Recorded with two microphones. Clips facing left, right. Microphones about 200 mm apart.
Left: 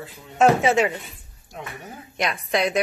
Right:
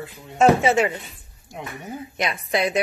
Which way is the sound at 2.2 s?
5° right (ahead or behind).